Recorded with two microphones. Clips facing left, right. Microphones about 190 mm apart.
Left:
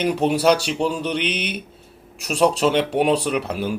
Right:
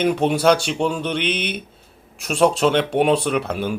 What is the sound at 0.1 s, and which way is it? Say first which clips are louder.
Speech: right 1 dB; 5° left (ahead or behind).